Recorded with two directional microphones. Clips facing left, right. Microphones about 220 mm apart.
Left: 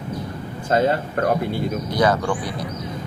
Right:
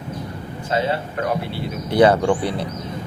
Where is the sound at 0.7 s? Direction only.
45° left (ahead or behind).